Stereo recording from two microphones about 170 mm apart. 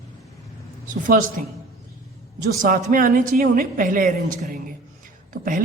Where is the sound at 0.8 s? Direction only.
50° right (ahead or behind).